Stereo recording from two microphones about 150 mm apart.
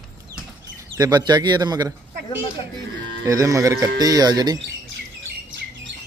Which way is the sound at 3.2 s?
20° right (ahead or behind).